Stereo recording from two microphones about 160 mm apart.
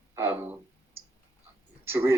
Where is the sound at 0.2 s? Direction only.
15° right (ahead or behind).